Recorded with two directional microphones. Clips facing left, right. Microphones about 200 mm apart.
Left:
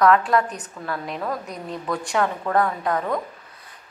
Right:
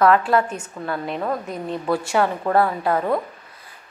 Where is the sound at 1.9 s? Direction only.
5° right (ahead or behind).